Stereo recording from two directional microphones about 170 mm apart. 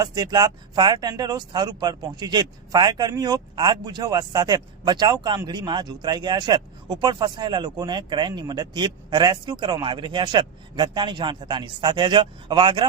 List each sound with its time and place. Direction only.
0.0 s speech: 25° right (ahead or behind)